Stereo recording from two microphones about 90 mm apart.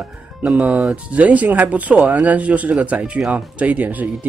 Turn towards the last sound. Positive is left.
turn(degrees=-20)  # may be behind; listen again after turning